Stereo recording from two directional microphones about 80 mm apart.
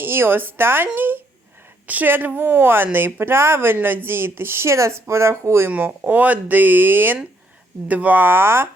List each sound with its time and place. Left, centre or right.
0.0 s speech: right
5.7 s speech: right